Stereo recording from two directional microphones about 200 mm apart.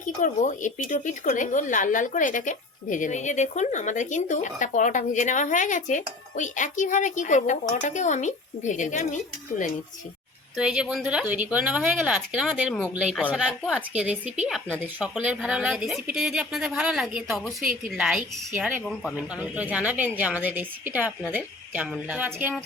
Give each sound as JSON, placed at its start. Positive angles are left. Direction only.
{"t": 0.0, "sound": "speech", "side_deg": 40}
{"t": 10.6, "sound": "a woman's voice", "side_deg": -5}